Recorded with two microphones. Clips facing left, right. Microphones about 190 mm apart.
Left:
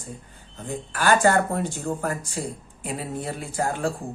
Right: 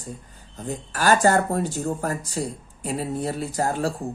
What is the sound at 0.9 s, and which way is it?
Speech, 40° right (ahead or behind).